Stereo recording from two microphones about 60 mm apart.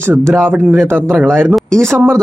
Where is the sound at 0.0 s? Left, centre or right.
Right.